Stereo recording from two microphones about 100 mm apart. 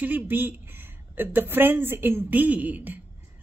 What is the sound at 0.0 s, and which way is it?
A woman's voice, 20° right (ahead or behind).